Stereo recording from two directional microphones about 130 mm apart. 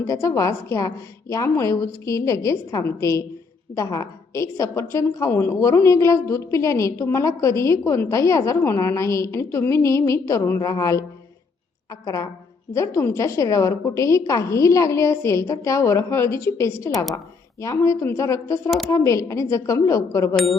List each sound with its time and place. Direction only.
0.1 s a woman's voice: 25° left (ahead or behind)
20.3 s speech: centre (ahead or behind)